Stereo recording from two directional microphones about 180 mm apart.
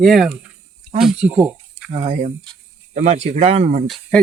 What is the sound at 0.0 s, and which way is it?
Speech, centre (ahead or behind).